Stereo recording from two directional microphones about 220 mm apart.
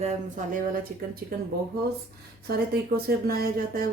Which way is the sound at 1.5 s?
45° right (ahead or behind).